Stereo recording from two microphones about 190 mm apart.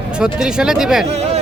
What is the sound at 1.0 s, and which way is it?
Speech, 35° right (ahead or behind).